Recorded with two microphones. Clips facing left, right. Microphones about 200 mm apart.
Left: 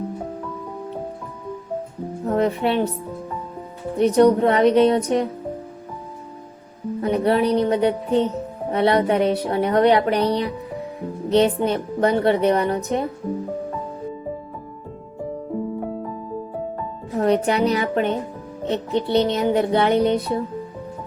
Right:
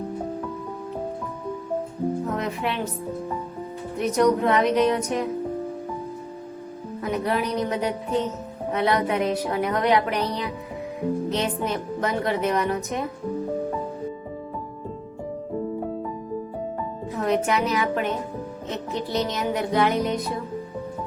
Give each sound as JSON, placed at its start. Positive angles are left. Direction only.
{"t": 2.2, "sound": "speech", "side_deg": 35}
{"t": 3.9, "sound": "a woman's voice", "side_deg": 30}
{"t": 7.0, "sound": "a woman's voice", "side_deg": 35}
{"t": 17.2, "sound": "a woman's voice", "side_deg": 35}